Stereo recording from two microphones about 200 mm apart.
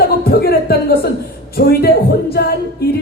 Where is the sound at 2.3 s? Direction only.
50° left (ahead or behind).